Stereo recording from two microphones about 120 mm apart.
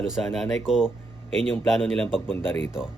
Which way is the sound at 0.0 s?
Centre (ahead or behind).